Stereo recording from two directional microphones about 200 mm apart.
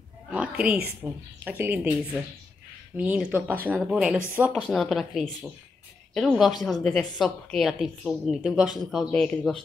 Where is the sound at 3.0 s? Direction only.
5° right (ahead or behind).